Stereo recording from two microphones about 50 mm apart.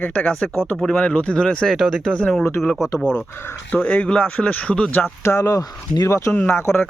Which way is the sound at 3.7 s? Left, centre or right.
Left.